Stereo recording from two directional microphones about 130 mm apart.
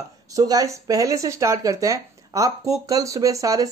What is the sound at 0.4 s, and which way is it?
Speech, 30° right (ahead or behind).